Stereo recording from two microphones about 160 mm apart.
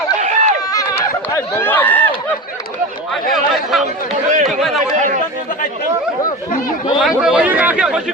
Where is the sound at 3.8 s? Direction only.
50° right (ahead or behind).